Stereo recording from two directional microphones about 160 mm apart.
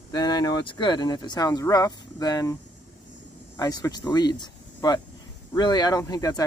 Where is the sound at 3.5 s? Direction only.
25° left (ahead or behind).